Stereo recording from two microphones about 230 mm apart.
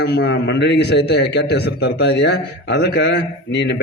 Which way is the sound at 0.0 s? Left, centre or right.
Left.